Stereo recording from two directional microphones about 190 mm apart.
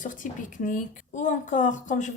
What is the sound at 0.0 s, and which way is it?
A woman's voice, 45° left (ahead or behind).